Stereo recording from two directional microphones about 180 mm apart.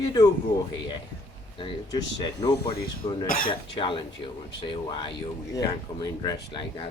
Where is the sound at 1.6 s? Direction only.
25° left (ahead or behind).